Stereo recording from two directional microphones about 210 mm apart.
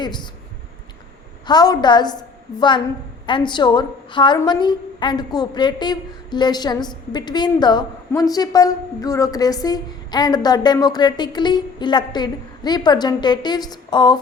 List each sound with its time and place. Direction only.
0.0 s a woman's voice: 20° left (ahead or behind)
1.5 s a woman's voice: 20° left (ahead or behind)